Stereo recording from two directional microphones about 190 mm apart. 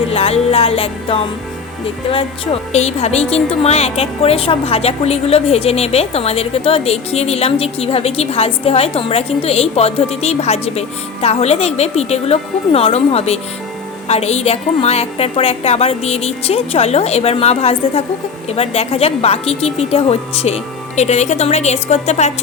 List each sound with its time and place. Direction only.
0.1 s music: 30° left (ahead or behind)
2.0 s a woman's voice: 30° left (ahead or behind)